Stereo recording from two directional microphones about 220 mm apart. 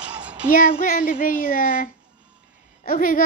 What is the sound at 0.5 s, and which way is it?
Speech, 40° left (ahead or behind).